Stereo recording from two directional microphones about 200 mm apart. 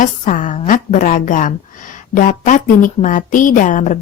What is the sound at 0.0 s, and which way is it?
A woman's voice, 40° left (ahead or behind).